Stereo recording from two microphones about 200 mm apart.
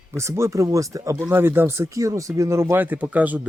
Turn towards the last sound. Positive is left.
turn(degrees=-10)  # may be behind; listen again after turning